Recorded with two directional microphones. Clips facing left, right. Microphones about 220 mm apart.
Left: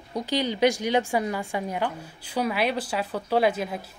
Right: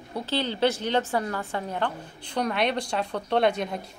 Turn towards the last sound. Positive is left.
turn(degrees=5)  # may be behind; listen again after turning